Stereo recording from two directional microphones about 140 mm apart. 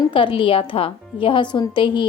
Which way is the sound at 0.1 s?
40° left (ahead or behind).